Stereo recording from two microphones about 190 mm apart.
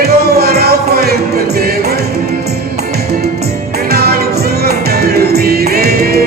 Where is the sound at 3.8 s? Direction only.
55° right (ahead or behind).